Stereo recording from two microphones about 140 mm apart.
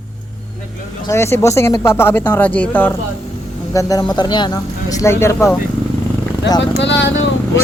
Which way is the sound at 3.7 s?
25° left (ahead or behind).